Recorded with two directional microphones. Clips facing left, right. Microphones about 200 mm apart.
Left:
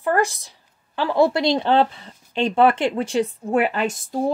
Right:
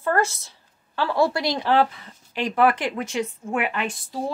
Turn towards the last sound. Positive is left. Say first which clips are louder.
# left 6 dB
turn(degrees=40)  # may be behind; listen again after turning